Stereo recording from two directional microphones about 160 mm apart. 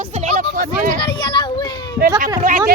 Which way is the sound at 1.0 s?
30° left (ahead or behind).